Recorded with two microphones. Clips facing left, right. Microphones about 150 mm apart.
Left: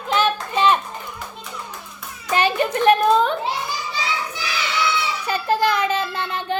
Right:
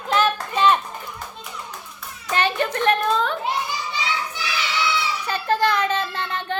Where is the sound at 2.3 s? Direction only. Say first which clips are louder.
Left 3 dB; 10° left (ahead or behind).